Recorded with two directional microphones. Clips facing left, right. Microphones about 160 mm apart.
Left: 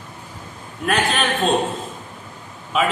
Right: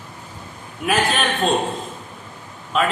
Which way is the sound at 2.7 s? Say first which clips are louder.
Even; 5° left (ahead or behind).